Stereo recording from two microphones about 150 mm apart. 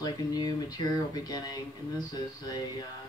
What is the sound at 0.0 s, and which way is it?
Speech, 25° left (ahead or behind).